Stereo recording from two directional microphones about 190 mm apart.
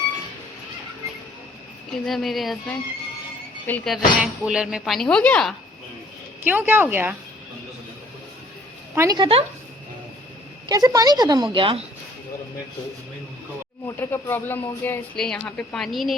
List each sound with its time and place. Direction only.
1.9 s speech: centre (ahead or behind)
6.4 s speech: 10° right (ahead or behind)
9.0 s a woman's voice: 20° right (ahead or behind)
10.7 s a woman's voice: 20° right (ahead or behind)
13.8 s speech: 15° left (ahead or behind)